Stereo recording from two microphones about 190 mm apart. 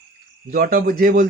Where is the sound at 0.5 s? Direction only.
50° right (ahead or behind).